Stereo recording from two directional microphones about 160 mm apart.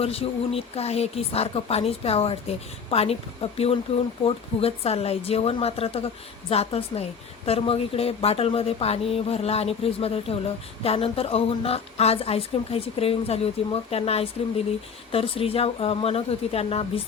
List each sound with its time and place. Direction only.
0.0 s speech: 40° left (ahead or behind)